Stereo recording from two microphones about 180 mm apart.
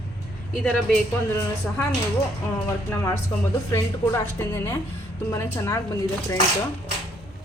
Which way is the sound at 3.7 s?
15° left (ahead or behind).